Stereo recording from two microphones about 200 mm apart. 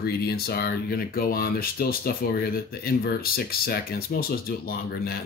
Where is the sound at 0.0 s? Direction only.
50° left (ahead or behind).